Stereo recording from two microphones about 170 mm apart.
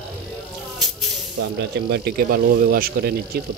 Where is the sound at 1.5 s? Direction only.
70° right (ahead or behind).